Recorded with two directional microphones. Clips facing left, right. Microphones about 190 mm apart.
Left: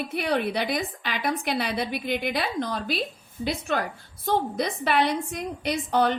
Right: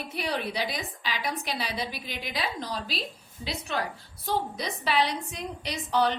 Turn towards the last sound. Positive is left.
turn(degrees=50)  # may be behind; listen again after turning